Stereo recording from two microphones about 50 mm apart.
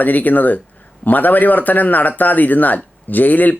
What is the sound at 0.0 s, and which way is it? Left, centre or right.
Speech, left.